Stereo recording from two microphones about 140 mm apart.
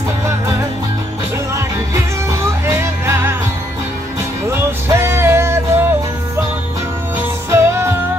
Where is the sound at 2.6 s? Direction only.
20° right (ahead or behind).